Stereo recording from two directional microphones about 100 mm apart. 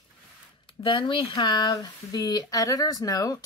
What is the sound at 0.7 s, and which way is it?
Speech, 60° left (ahead or behind).